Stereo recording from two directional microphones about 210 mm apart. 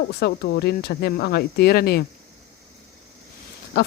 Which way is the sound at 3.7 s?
50° left (ahead or behind).